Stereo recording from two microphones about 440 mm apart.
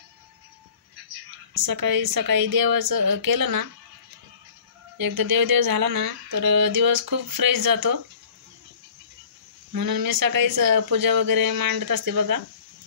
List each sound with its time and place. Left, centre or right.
1.5 s speech: right
4.9 s speech: right
9.7 s speech: right